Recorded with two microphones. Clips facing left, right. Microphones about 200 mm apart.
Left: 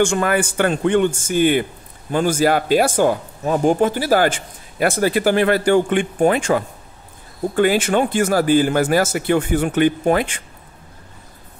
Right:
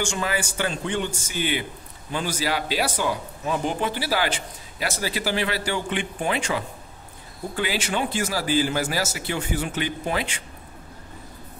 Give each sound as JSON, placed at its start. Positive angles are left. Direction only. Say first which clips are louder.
{"t": 0.0, "sound": "a man's voice", "louder": "left 9 dB", "side_deg": 55}